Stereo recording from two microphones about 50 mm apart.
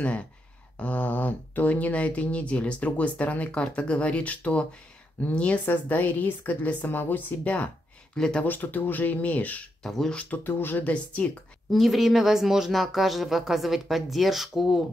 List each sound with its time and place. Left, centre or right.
0.7 s speech: left
5.7 s a woman's voice: left
9.8 s a woman's voice: centre
10.4 s a woman's voice: left
10.8 s speech: left
11.7 s a woman's voice: centre